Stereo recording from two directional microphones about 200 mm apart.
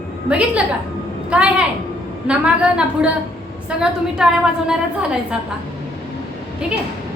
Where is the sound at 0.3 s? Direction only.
5° right (ahead or behind).